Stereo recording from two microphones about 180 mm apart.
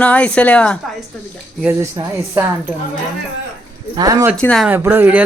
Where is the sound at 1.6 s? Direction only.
15° right (ahead or behind).